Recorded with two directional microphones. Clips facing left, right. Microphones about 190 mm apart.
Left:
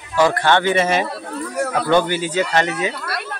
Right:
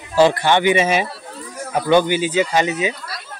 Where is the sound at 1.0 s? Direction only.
65° left (ahead or behind).